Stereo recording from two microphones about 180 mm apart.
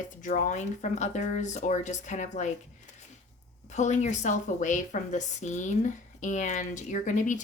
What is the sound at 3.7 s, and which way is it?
A woman's voice, 40° left (ahead or behind).